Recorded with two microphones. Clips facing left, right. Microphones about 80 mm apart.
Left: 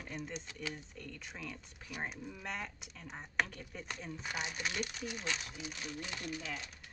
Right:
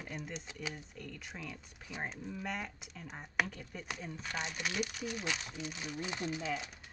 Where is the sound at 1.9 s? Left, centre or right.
Right.